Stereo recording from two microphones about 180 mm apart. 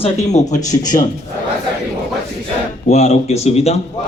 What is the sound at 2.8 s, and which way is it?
Speech, 40° left (ahead or behind).